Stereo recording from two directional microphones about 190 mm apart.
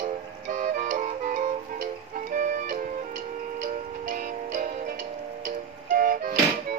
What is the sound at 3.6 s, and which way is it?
Music, 45° right (ahead or behind).